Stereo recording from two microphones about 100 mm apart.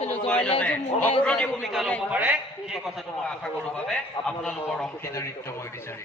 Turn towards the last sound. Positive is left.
turn(degrees=30)  # may be behind; listen again after turning